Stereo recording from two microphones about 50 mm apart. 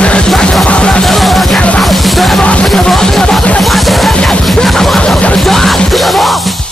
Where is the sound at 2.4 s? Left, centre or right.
Left.